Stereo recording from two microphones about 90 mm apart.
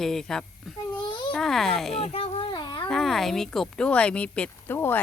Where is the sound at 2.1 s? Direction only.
90° left; by 2.9 s 55° left (ahead or behind).